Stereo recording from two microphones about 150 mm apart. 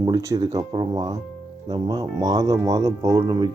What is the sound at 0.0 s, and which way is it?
Speech, 20° right (ahead or behind).